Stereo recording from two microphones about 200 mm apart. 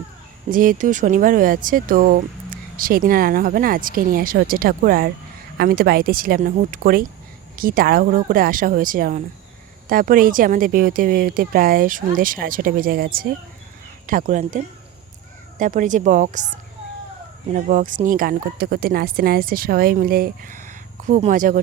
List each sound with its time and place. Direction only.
0.5 s speech: 45° right (ahead or behind)
17.5 s speech: 40° right (ahead or behind)